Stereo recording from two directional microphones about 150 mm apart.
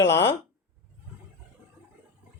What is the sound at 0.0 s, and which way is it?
Speech, 20° left (ahead or behind).